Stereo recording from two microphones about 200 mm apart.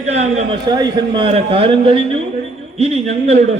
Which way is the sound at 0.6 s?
20° right (ahead or behind).